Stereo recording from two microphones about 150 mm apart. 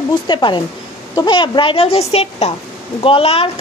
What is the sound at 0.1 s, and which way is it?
A woman's voice, 30° left (ahead or behind).